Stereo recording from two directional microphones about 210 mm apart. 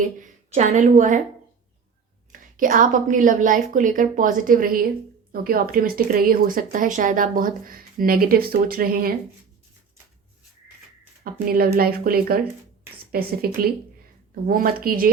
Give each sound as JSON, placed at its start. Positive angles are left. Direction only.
{"t": 0.0, "sound": "a woman's voice", "side_deg": -35}
{"t": 2.3, "sound": "a woman's voice", "side_deg": -40}
{"t": 11.2, "sound": "a woman's voice", "side_deg": -45}